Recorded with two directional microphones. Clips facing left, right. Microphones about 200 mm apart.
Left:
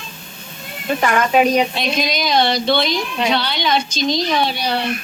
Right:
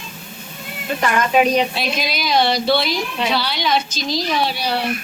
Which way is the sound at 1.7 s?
5° right (ahead or behind).